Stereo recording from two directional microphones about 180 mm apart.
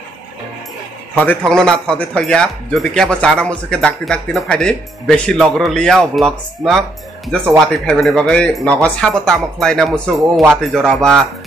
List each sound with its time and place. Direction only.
1.1 s speech: 10° left (ahead or behind)